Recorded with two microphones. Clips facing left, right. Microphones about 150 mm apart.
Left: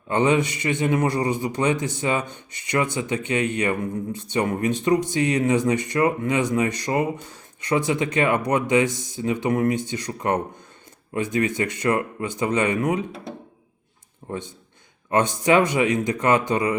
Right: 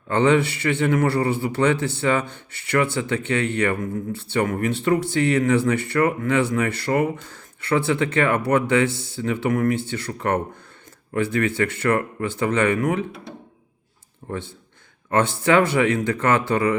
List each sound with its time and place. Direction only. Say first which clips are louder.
0.1 s a man's voice: right 2 dB; 15° left (ahead or behind)
14.3 s a man's voice: right 1 dB; 15° left (ahead or behind)